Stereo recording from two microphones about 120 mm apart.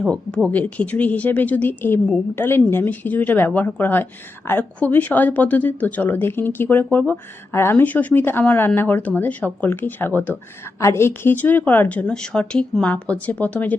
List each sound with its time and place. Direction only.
0.1 s a woman's voice: 5° left (ahead or behind)